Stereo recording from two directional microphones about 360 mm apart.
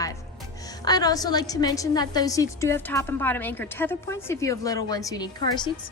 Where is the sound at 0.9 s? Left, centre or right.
Centre.